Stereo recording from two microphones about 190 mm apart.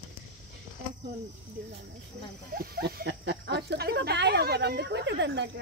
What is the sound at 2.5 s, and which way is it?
Snake, 55° right (ahead or behind).